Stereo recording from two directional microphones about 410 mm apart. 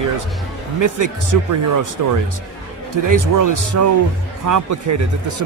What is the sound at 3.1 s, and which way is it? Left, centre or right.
Speech, right.